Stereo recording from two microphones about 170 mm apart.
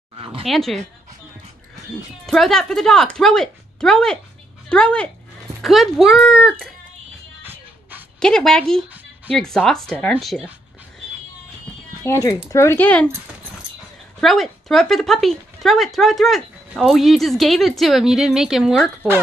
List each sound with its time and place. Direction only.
0.2 s dog: 30° right (ahead or behind)
0.5 s speech: centre (ahead or behind)
2.2 s speech: centre (ahead or behind)
8.2 s speech: 5° left (ahead or behind)
12.0 s speech: 20° left (ahead or behind)
14.2 s speech: centre (ahead or behind)